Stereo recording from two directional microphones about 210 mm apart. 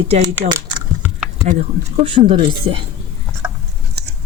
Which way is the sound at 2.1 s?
25° right (ahead or behind).